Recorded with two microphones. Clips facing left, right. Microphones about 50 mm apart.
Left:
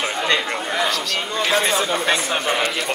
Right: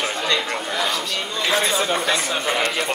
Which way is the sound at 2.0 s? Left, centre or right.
Left.